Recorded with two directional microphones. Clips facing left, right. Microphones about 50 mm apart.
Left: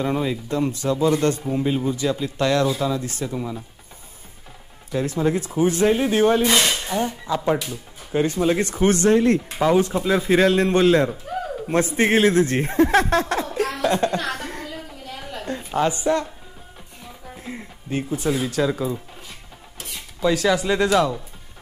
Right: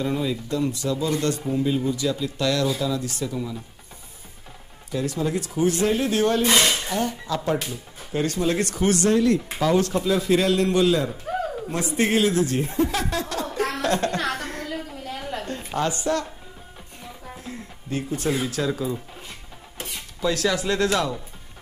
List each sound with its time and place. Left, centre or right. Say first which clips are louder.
0.0 s speech: left 2 dB; left
4.9 s speech: left 4 dB; left
9.8 s speech: left 2 dB; centre
10.0 s a man's voice: left 3 dB; left
13.5 s laughter: left 2 dB; centre
13.8 s speech: left 4 dB; left
14.4 s a sound: even; centre
15.7 s speech: left 4 dB; centre
17.4 s music: left 2 dB; left
18.3 s speech: left 4 dB; centre
20.2 s speech: left 4 dB; centre